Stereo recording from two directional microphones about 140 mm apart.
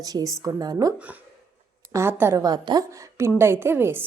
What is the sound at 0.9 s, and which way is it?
A woman's voice, 10° right (ahead or behind).